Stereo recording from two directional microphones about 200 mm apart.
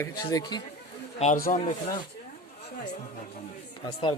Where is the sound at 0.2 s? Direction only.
20° left (ahead or behind).